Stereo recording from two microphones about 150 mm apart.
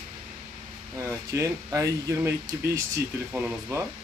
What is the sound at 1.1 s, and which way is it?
Speech, 20° right (ahead or behind).